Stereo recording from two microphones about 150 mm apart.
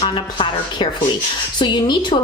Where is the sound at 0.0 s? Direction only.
35° left (ahead or behind).